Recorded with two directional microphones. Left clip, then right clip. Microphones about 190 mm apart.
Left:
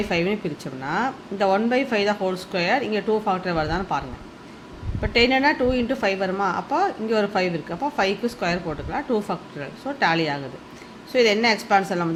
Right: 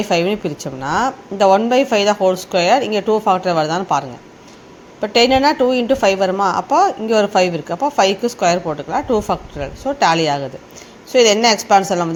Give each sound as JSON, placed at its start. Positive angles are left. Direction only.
{"t": 0.1, "sound": "a woman's voice", "side_deg": -30}